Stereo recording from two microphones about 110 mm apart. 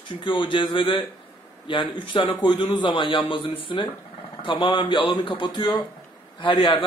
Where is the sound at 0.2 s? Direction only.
50° left (ahead or behind).